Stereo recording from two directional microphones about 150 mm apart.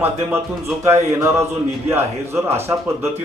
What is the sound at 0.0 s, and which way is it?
A man's voice, 15° right (ahead or behind).